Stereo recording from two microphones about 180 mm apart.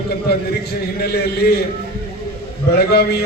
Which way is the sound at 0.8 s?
60° left (ahead or behind).